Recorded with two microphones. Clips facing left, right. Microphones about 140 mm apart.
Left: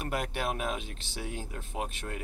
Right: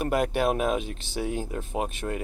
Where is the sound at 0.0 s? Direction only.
50° right (ahead or behind).